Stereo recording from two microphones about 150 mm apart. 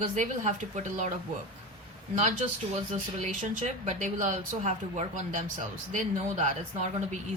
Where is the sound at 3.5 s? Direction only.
55° right (ahead or behind).